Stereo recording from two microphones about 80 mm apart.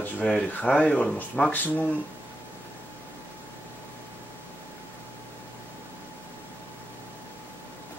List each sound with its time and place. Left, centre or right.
0.0 s speech: centre